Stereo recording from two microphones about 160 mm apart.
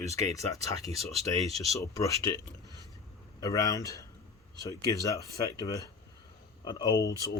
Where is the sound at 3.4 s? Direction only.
20° left (ahead or behind).